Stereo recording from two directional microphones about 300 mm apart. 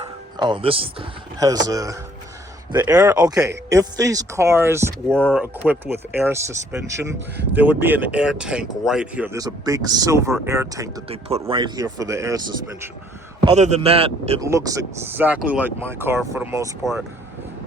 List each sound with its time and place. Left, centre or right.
0.3 s speech: centre
5.0 s speech: centre
13.4 s speech: right